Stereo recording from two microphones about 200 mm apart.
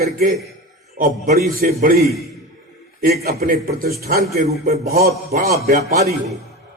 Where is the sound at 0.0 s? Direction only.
45° right (ahead or behind).